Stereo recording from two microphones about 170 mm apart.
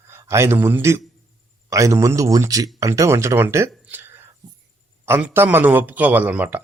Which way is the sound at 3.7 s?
10° right (ahead or behind).